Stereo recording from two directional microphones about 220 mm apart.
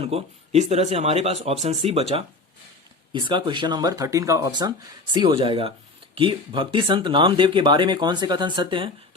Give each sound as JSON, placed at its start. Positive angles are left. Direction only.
{"t": 0.0, "sound": "speech", "side_deg": -30}